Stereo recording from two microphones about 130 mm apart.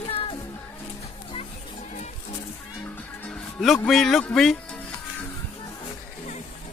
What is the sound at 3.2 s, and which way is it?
Speech, 5° left (ahead or behind).